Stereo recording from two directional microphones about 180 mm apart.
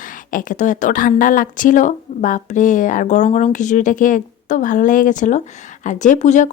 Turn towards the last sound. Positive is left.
turn(degrees=40)  # may be behind; listen again after turning